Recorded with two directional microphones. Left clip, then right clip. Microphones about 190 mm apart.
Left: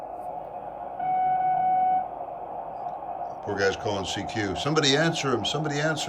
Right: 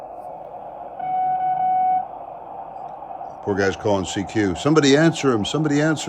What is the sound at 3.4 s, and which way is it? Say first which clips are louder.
Speech: right 5 dB; 30° right (ahead or behind).